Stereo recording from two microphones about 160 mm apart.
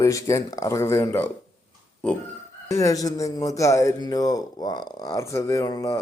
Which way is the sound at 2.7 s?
20° left (ahead or behind).